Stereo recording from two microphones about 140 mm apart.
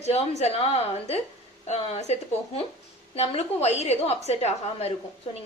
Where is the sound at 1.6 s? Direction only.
55° left (ahead or behind).